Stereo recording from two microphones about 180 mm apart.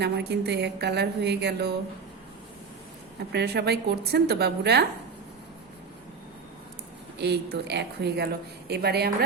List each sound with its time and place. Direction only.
0.0 s a sound: 65° right (ahead or behind)
3.3 s a woman's voice: 65° right (ahead or behind)
7.2 s a woman's voice: 65° right (ahead or behind)